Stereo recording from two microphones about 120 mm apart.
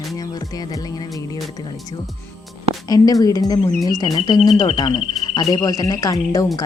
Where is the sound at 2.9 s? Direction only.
30° left (ahead or behind).